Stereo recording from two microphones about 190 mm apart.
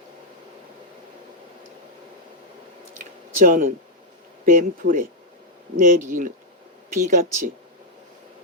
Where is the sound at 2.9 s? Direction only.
45° right (ahead or behind).